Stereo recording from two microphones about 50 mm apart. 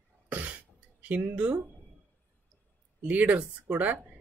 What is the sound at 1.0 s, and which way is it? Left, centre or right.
Speech, right.